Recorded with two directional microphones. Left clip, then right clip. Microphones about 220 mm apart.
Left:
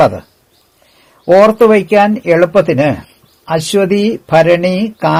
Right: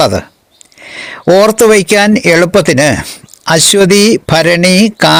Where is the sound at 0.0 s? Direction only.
35° right (ahead or behind).